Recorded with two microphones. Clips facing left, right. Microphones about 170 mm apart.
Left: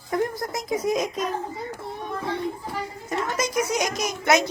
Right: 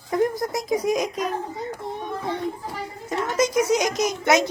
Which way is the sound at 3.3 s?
20° right (ahead or behind).